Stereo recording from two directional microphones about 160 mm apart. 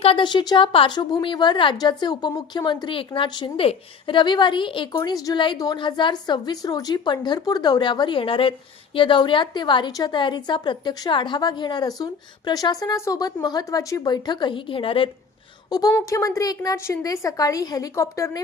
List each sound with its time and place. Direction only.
0.0 s speech: 35° left (ahead or behind)
16.0 s speech: 20° left (ahead or behind)